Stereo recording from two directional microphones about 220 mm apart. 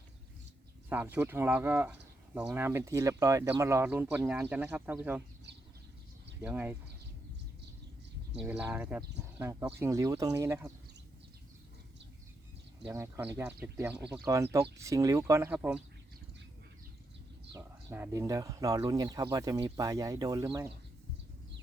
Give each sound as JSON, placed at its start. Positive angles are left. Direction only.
{"t": 0.9, "sound": "speech", "side_deg": -10}
{"t": 6.4, "sound": "speech", "side_deg": -10}
{"t": 8.4, "sound": "speech", "side_deg": -5}
{"t": 12.8, "sound": "speech", "side_deg": -15}
{"t": 17.5, "sound": "speech", "side_deg": -15}